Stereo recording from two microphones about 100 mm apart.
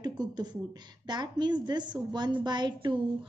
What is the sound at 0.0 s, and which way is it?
A woman's voice, 45° right (ahead or behind).